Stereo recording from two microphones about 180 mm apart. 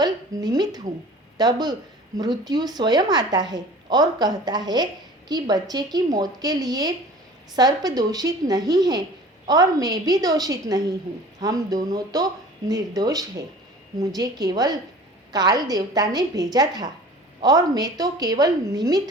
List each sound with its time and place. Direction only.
0.0 s a woman's voice: 20° right (ahead or behind)